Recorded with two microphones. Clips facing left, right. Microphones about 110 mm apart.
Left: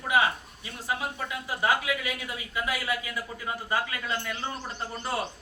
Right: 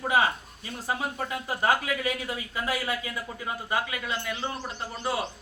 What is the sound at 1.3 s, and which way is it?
Speech, 40° right (ahead or behind).